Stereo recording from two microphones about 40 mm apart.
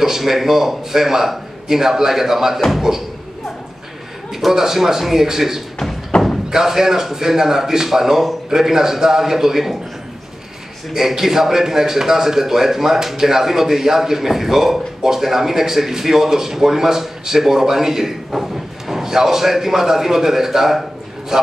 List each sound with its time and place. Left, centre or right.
0.0 s a man's voice: centre
4.3 s a man's voice: centre
6.1 s a sound: left
6.5 s a man's voice: centre
10.9 s a man's voice: centre